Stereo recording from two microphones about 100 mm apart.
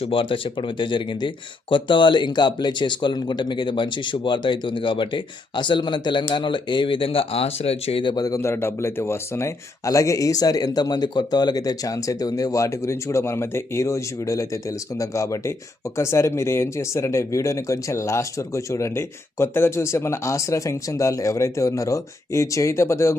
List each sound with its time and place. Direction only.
0.0 s speech: 60° left (ahead or behind); by 8.0 s 80° left
8.0 s speech: 40° left (ahead or behind)
8.4 s speech: 25° left (ahead or behind)